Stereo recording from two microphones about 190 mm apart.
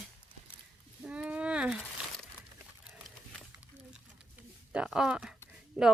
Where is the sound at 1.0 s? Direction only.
5° right (ahead or behind).